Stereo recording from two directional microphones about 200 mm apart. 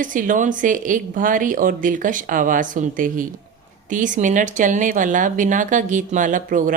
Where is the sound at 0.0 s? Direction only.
40° right (ahead or behind).